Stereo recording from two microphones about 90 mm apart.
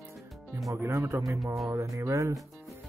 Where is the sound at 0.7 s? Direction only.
25° right (ahead or behind).